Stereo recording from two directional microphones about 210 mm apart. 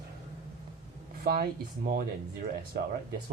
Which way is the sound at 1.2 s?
45° right (ahead or behind).